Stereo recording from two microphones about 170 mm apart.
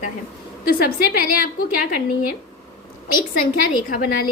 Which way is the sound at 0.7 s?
60° left (ahead or behind).